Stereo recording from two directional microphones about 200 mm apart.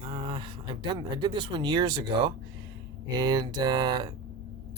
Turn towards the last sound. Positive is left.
turn(degrees=-20)  # may be behind; listen again after turning